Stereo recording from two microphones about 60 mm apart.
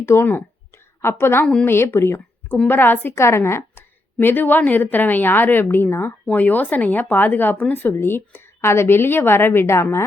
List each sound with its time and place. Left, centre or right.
0.0 s speech: left
3.2 s speech: left
6.3 s speech: left